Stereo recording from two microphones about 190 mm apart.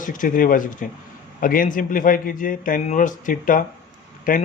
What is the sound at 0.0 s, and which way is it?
A man's voice, 45° left (ahead or behind).